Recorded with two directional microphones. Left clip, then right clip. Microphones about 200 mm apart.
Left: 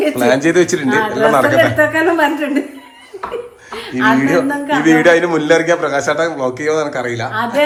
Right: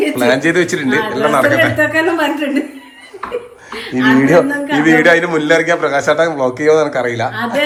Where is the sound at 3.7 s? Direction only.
Centre (ahead or behind).